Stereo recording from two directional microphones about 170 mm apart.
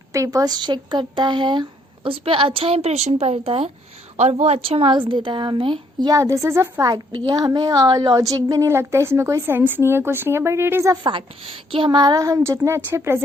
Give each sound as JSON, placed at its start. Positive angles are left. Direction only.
{"t": 0.1, "sound": "a woman's voice", "side_deg": -20}
{"t": 11.0, "sound": "speech", "side_deg": -30}